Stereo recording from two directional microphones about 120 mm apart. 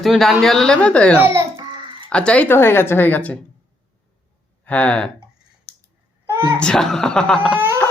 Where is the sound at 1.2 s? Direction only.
20° right (ahead or behind).